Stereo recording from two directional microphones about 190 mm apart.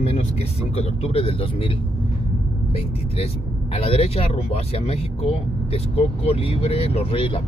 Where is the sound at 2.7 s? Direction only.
30° left (ahead or behind).